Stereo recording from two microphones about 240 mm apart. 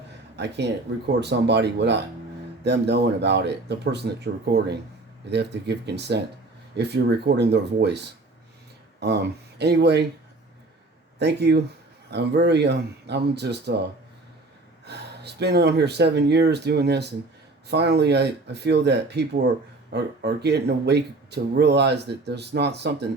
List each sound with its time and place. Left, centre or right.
0.3 s speech: right
11.2 s speech: right
14.8 s speech: right